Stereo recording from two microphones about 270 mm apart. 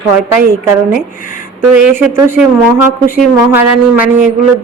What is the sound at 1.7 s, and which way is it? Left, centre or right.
Speech, centre.